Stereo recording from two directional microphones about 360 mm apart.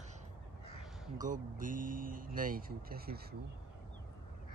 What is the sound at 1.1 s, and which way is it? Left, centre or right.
Speech, right.